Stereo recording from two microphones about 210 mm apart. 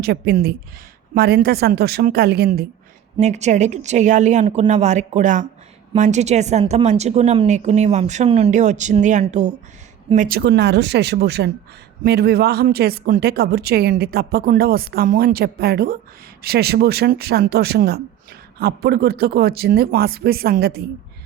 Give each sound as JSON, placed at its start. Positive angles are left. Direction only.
{"t": 0.0, "sound": "speech", "side_deg": -50}
{"t": 3.2, "sound": "a woman's voice", "side_deg": -35}